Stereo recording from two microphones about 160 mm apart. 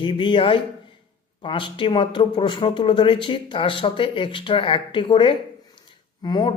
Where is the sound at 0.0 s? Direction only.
30° left (ahead or behind).